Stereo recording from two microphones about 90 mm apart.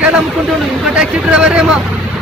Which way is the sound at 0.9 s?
10° right (ahead or behind).